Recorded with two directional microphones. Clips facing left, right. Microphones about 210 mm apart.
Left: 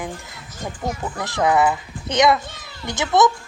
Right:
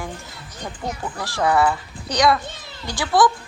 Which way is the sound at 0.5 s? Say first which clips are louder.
Left 2 dB; 5° left (ahead or behind).